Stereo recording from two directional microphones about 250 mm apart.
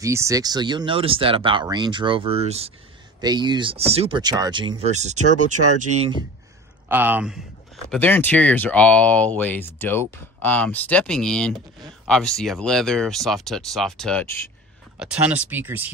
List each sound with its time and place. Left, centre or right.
0.0 s speech: centre
6.9 s speech: centre
15.0 s speech: centre